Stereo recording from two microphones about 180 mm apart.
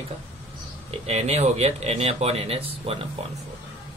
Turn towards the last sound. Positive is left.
turn(degrees=-30)  # may be behind; listen again after turning